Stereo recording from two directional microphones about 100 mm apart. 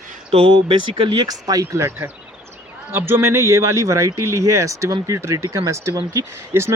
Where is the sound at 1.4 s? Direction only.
35° right (ahead or behind).